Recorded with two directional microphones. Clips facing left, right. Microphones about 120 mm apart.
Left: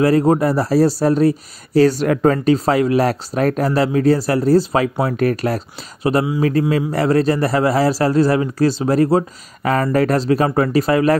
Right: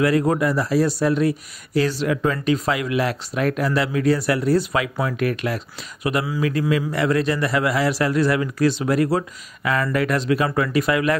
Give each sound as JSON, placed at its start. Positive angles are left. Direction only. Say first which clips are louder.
{"t": 0.0, "sound": "speech", "louder": "left 5 dB", "side_deg": 30}